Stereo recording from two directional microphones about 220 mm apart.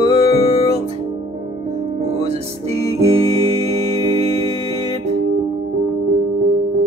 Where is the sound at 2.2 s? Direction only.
25° right (ahead or behind).